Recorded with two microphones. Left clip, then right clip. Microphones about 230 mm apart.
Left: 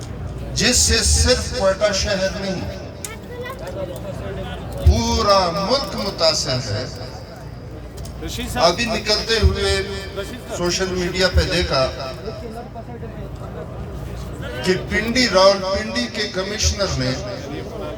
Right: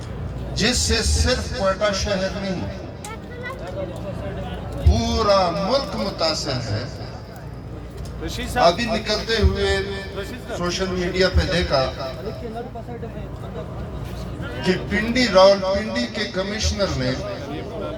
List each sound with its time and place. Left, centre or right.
0.5 s a man's voice: left
4.9 s a man's voice: left
8.2 s speech: centre
8.6 s a man's voice: left
14.6 s a man's voice: left